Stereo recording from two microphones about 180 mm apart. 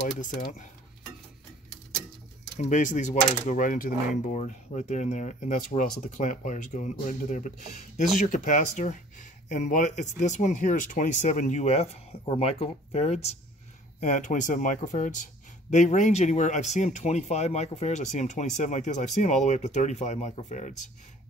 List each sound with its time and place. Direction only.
0.0 s speech: 45° left (ahead or behind)
2.6 s speech: 45° left (ahead or behind)